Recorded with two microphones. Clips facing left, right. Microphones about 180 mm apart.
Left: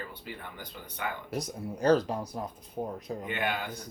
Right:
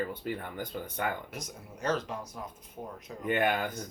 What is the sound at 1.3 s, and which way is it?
Speech, 35° left (ahead or behind).